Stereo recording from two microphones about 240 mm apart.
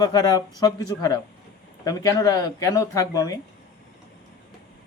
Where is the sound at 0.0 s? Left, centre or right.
Centre.